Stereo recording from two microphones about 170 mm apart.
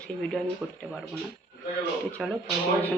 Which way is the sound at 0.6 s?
Centre (ahead or behind).